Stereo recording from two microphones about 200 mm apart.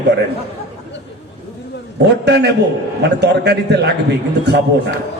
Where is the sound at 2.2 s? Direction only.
55° right (ahead or behind).